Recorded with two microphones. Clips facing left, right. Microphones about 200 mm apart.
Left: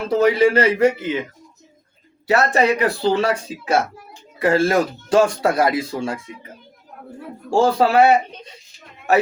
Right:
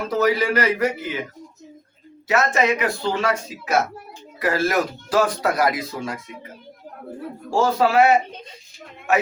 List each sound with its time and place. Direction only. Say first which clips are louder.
0.1 s speech: left 5 dB; 30° left (ahead or behind)
2.2 s speech: left 3 dB; 35° left (ahead or behind)
7.5 s speech: left 3 dB; 30° left (ahead or behind)